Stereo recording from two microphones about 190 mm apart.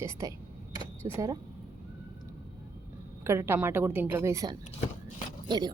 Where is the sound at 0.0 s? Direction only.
15° right (ahead or behind).